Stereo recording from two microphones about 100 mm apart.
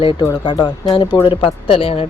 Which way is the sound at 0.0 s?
60° left (ahead or behind).